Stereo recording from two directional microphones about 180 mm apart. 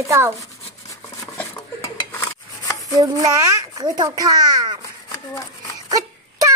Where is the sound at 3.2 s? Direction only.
20° right (ahead or behind).